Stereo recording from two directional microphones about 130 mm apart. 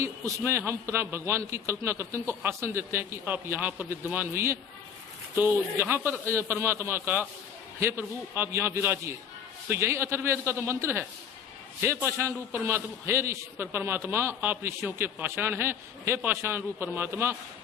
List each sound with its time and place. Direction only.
0.0 s a man's voice: 20° right (ahead or behind)